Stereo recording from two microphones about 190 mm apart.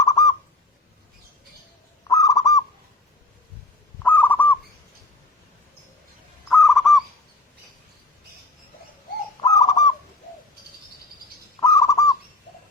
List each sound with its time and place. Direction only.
0.0 s a sound: 20° left (ahead or behind)
2.0 s bird: 20° left (ahead or behind)
4.0 s fowl: 10° left (ahead or behind)
6.5 s owl: centre (ahead or behind)
9.4 s bird: 20° left (ahead or behind)
11.6 s bird: 15° left (ahead or behind)